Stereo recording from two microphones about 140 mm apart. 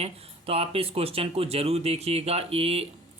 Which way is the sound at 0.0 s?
45° right (ahead or behind).